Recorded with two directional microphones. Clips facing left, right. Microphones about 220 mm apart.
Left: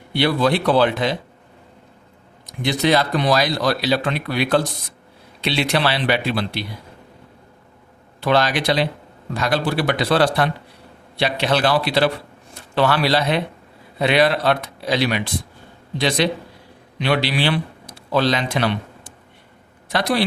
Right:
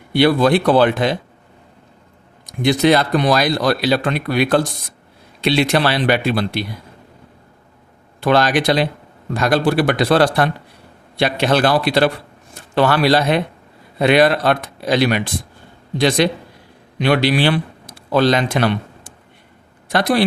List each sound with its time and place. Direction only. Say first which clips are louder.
0.1 s speech: right 5 dB; 50° right (ahead or behind)
2.5 s speech: right 4 dB; 50° right (ahead or behind)
8.2 s a man's voice: right 3 dB; 50° right (ahead or behind)